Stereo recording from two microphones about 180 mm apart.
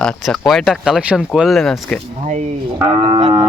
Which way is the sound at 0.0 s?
5° left (ahead or behind).